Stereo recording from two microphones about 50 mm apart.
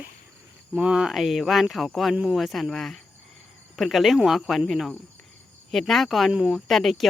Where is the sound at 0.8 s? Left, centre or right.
Centre.